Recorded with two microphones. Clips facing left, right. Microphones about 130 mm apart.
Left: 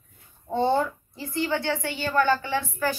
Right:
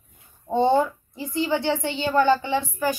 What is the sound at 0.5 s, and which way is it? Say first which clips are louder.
Speech: right 3 dB; 20° right (ahead or behind).